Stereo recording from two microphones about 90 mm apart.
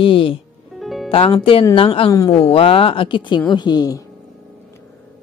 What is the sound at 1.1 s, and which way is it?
A woman's voice, 90° left.